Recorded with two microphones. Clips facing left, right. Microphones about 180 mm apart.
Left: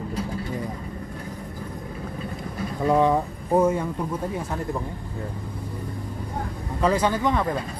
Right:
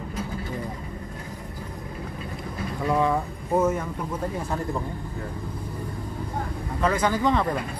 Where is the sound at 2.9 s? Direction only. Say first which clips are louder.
Left 4 dB; 15° left (ahead or behind).